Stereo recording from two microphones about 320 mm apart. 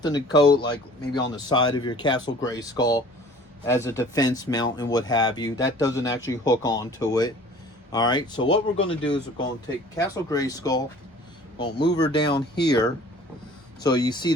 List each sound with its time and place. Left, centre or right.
0.0 s speech: centre
11.9 s speech: left
12.1 s speech: centre